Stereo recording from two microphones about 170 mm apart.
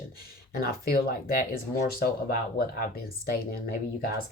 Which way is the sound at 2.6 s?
60° left (ahead or behind).